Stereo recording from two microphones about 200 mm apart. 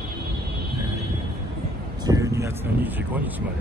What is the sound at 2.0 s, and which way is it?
Speech, 15° right (ahead or behind).